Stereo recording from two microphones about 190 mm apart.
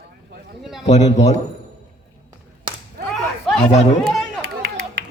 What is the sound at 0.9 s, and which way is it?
Speech, 35° left (ahead or behind).